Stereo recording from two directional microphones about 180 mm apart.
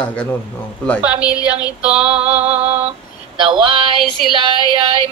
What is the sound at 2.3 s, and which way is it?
Female singing, 35° right (ahead or behind).